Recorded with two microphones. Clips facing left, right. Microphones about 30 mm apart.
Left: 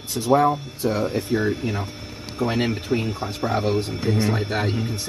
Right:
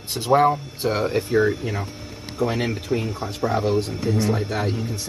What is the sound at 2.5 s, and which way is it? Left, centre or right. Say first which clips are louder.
A man's voice: left 4 dB; left.